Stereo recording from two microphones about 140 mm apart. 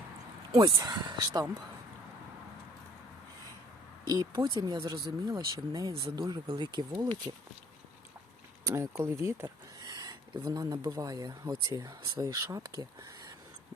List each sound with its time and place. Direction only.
0.5 s speech: 30° right (ahead or behind)
4.1 s speech: 25° right (ahead or behind)
8.6 s speech: 20° right (ahead or behind)